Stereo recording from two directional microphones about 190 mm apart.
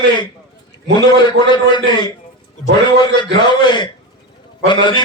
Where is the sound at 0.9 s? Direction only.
25° left (ahead or behind).